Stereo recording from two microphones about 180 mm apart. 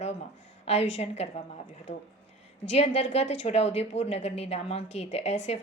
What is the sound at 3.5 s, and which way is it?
A woman's voice, 35° left (ahead or behind).